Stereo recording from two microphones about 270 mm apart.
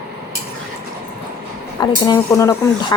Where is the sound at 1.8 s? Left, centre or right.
Centre.